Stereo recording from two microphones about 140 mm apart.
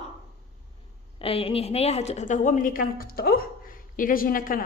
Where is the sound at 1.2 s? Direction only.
45° left (ahead or behind).